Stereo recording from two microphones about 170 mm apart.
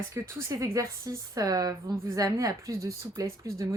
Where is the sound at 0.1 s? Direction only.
15° right (ahead or behind).